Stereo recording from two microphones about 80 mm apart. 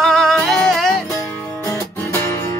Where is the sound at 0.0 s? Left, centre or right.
Centre.